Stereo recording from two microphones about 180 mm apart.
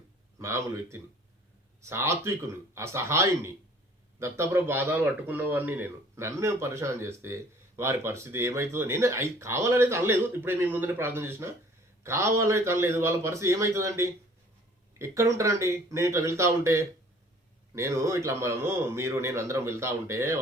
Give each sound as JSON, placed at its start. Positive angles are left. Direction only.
{"t": 0.3, "sound": "a man's voice", "side_deg": -15}